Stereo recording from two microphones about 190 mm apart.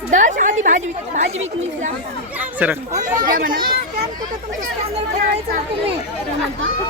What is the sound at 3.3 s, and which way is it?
Speech, 50° right (ahead or behind).